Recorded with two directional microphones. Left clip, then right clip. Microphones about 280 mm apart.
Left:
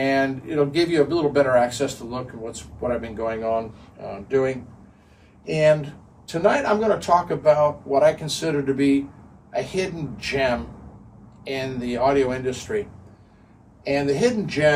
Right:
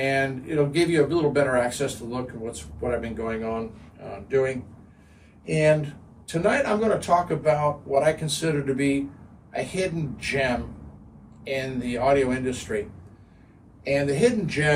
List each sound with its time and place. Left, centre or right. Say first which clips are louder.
0.0 s speech: left 3 dB; centre
13.8 s speech: left 1 dB; centre